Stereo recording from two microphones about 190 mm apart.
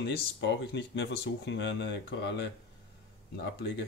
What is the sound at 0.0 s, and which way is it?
Speech, 65° left (ahead or behind).